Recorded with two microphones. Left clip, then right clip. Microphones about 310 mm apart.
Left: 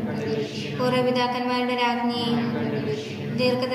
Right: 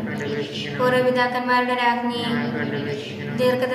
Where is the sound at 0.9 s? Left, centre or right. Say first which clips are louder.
Right 2 dB; right.